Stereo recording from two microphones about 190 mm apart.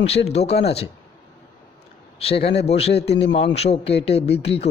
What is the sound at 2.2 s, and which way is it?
A man's voice, 30° left (ahead or behind).